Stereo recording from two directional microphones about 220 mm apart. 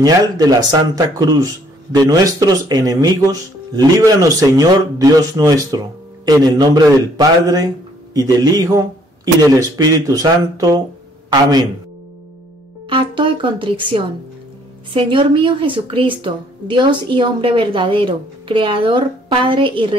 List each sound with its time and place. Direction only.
0.0 s speech: 15° right (ahead or behind)
12.9 s a woman's voice: 20° right (ahead or behind)